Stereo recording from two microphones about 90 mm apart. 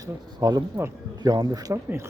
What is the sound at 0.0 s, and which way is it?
A woman's voice, 45° right (ahead or behind).